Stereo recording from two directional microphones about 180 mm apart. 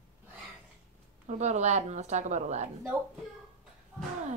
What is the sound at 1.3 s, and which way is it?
A woman's voice, 40° right (ahead or behind).